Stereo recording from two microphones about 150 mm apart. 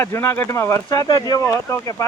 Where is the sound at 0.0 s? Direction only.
15° left (ahead or behind).